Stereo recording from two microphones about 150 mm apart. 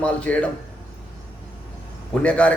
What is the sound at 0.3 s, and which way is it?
Speech, 10° left (ahead or behind).